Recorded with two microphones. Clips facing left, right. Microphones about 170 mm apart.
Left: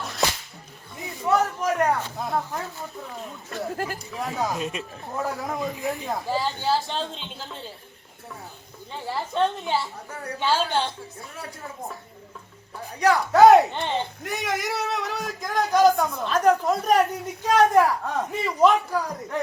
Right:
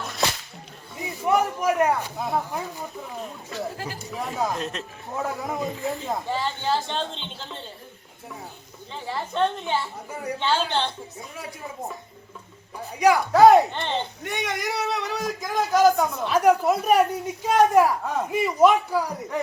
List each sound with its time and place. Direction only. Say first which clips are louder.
1.2 s a sound: right 1 dB; 15° right (ahead or behind)
2.1 s speech: right 1 dB; 5° right (ahead or behind)
3.5 s speech: left 3 dB; 50° left (ahead or behind)
3.9 s speech: even; centre (ahead or behind)
8.9 s speech: left 1 dB; 5° left (ahead or behind)
10.1 s a woman's voice: right 4 dB; 10° right (ahead or behind)
10.4 s a woman's voice: left 1 dB; 5° left (ahead or behind)
13.3 s speech: left 1 dB; centre (ahead or behind)